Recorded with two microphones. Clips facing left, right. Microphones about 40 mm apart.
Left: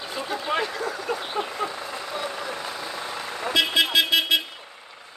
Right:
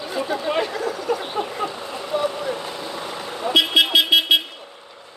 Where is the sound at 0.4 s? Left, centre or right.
Centre.